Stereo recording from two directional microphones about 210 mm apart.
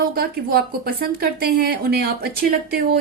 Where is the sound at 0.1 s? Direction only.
45° right (ahead or behind).